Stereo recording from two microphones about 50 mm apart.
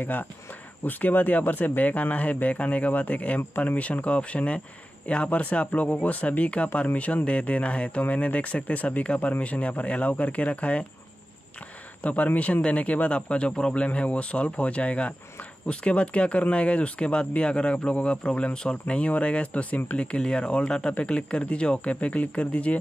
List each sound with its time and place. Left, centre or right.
0.0 s speech: left
12.0 s speech: left